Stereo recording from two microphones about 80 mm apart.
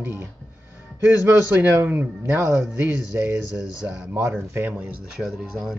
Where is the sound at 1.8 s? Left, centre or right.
Right.